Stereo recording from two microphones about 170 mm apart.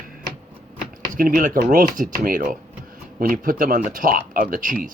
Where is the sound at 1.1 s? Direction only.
55° right (ahead or behind).